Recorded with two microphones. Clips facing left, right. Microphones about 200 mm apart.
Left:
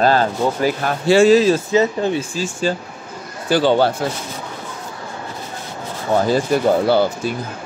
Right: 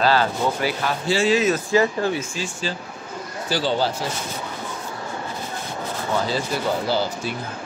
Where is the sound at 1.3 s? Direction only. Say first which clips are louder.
Left 6 dB; 30° left (ahead or behind).